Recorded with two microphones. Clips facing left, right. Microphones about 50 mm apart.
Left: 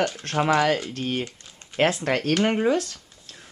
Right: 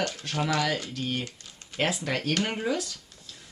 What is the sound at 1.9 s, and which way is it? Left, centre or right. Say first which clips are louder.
Speech: left 5 dB; left.